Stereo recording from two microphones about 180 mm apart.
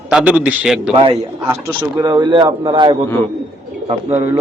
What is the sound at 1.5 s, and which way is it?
A man's voice, 15° right (ahead or behind).